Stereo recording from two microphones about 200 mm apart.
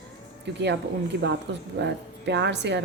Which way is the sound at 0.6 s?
60° right (ahead or behind).